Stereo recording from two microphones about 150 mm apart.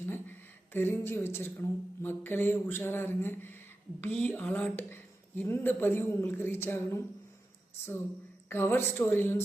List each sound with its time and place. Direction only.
0.0 s a woman's voice: 15° left (ahead or behind)
8.4 s speech: 15° left (ahead or behind)